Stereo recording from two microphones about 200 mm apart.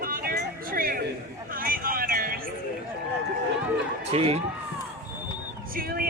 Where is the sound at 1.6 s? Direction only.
45° right (ahead or behind).